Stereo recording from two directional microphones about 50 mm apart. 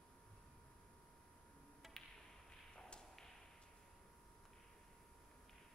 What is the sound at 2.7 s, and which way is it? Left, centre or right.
Whip, centre.